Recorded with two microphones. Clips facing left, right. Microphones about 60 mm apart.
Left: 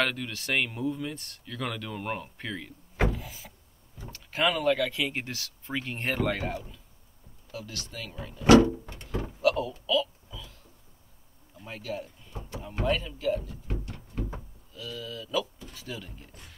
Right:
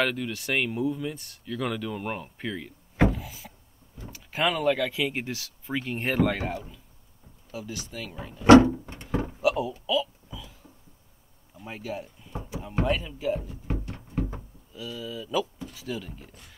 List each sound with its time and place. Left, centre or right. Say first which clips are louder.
0.0 s speech: right 2 dB; centre
3.1 s power windows: right 3 dB; centre
4.1 s speech: even; centre
8.5 s a sound: right 4 dB; right
9.4 s a sound: left 1 dB; centre
11.5 s door: right 1 dB; centre
12.8 s speech: left 1 dB; centre
13.9 s a sound: right 5 dB; right
14.7 s speech: right 2 dB; centre